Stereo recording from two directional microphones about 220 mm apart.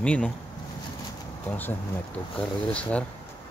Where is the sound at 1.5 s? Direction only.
10° left (ahead or behind).